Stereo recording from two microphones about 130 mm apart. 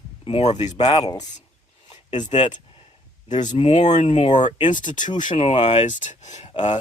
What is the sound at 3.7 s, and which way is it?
Speech, 60° left (ahead or behind).